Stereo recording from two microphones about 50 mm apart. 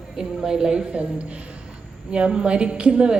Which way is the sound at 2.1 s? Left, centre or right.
Centre.